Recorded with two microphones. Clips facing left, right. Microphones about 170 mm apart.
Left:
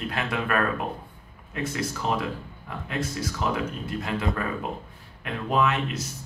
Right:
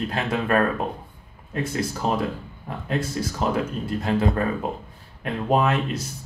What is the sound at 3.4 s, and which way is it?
Speech, 35° right (ahead or behind).